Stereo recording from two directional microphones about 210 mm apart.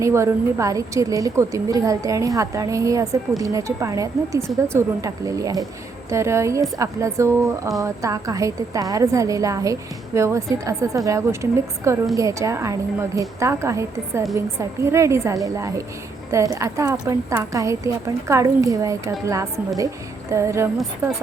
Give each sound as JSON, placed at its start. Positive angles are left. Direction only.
{"t": 0.0, "sound": "a woman's voice", "side_deg": -15}